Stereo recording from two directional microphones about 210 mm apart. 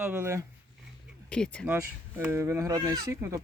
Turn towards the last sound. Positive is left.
turn(degrees=-15)  # may be behind; listen again after turning